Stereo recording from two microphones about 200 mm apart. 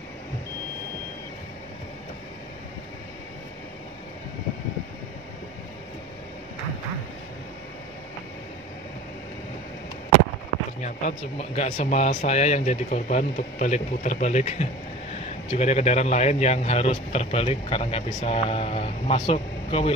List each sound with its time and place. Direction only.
10.8 s a man's voice: 35° left (ahead or behind)